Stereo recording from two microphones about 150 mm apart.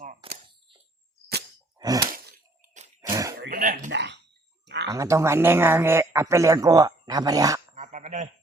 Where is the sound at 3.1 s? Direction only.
20° right (ahead or behind).